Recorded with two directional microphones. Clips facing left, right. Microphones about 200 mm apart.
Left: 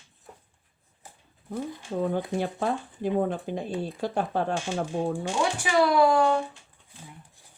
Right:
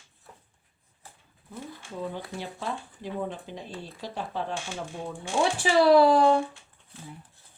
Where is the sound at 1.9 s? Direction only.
50° left (ahead or behind).